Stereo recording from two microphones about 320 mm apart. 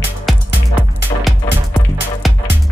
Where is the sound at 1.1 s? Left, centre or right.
Centre.